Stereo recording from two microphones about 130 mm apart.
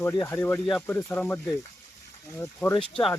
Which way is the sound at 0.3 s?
15° left (ahead or behind).